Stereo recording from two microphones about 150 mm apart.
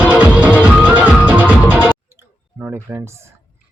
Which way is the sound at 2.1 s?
15° right (ahead or behind).